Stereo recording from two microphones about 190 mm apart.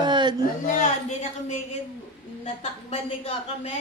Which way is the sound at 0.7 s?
40° left (ahead or behind).